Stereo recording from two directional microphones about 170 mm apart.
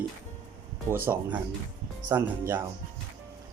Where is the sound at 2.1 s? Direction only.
10° right (ahead or behind).